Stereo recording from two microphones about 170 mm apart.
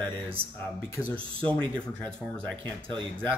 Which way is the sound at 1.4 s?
5° left (ahead or behind).